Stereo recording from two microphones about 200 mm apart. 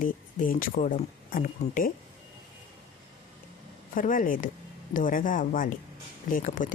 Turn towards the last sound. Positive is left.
turn(degrees=40)  # may be behind; listen again after turning